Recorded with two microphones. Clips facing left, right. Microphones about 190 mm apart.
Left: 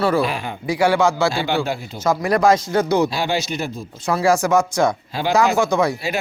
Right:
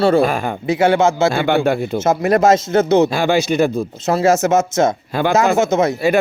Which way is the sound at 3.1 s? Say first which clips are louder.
Right 7 dB; 50° right (ahead or behind).